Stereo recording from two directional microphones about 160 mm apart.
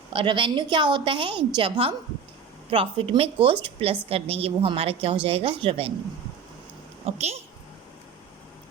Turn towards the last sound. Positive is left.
turn(degrees=-40)  # may be behind; listen again after turning